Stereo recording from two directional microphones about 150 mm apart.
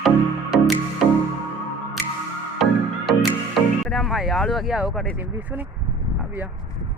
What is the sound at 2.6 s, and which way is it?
Music, centre (ahead or behind).